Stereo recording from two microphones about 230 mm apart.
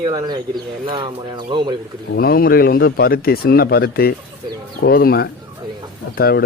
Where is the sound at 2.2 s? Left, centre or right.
Left.